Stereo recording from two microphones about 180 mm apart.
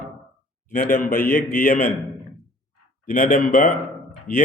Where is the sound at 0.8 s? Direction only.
55° left (ahead or behind).